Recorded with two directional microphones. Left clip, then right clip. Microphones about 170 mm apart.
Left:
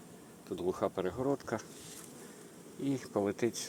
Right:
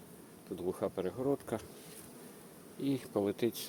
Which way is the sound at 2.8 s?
Centre (ahead or behind).